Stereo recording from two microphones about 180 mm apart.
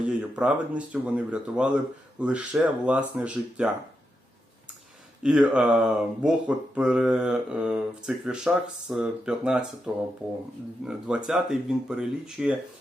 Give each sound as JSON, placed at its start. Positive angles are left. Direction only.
{"t": 0.0, "sound": "speech", "side_deg": -5}
{"t": 5.2, "sound": "speech", "side_deg": -5}